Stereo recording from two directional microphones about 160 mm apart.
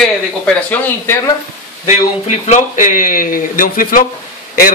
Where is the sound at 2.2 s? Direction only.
45° left (ahead or behind).